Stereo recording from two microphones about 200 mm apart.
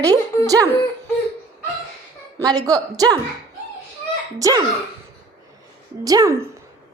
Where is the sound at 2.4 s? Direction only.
20° right (ahead or behind).